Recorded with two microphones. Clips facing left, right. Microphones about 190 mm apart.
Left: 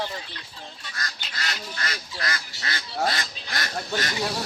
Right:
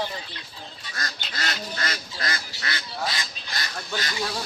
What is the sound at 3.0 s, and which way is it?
Goose, 60° left (ahead or behind).